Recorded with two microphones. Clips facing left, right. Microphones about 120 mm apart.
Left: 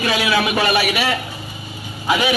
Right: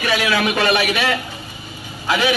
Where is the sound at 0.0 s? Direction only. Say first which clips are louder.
Even; 15° left (ahead or behind).